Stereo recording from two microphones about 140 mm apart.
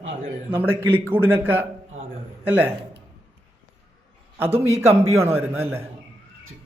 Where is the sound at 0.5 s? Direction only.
15° right (ahead or behind).